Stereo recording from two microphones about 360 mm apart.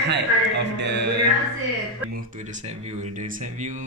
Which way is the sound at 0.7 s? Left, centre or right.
Right.